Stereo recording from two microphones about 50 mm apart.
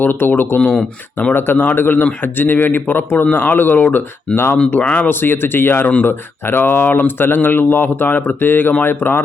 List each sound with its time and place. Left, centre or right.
0.0 s speech: left
4.8 s speech: left
5.0 s speech: left